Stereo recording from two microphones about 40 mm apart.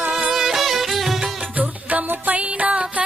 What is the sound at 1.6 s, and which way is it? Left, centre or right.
Music, right.